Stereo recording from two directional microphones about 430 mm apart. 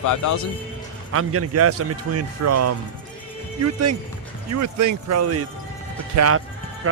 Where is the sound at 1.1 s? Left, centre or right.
Right.